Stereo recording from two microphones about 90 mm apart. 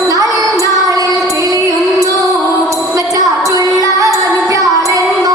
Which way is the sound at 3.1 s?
40° right (ahead or behind).